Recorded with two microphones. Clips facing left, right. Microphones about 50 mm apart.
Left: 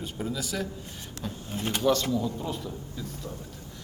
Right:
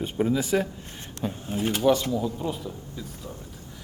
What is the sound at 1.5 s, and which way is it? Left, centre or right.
A man's voice, centre.